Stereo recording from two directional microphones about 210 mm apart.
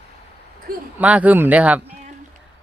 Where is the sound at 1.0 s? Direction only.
5° right (ahead or behind).